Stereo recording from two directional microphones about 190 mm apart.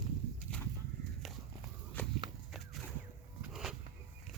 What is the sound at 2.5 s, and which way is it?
Whip, centre (ahead or behind).